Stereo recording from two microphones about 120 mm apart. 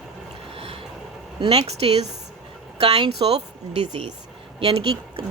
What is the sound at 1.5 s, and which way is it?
A woman's voice, 60° right (ahead or behind).